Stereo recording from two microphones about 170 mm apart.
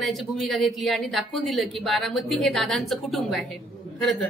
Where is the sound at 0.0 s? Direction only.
Centre (ahead or behind).